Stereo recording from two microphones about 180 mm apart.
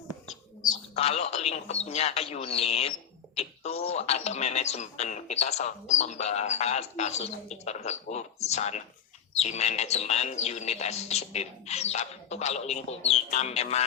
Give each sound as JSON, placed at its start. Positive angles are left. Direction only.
{"t": 0.9, "sound": "speech", "side_deg": 35}